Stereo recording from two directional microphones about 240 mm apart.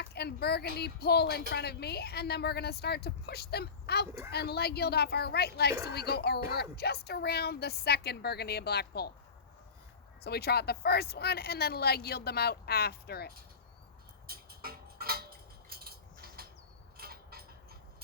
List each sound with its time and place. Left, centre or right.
0.0 s speech: left
10.2 s speech: left
14.3 s a sound: right